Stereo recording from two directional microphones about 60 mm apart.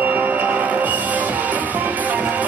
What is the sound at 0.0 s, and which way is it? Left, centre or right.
Music, right.